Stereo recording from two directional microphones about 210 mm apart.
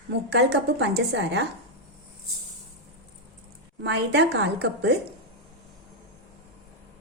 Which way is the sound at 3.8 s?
55° right (ahead or behind).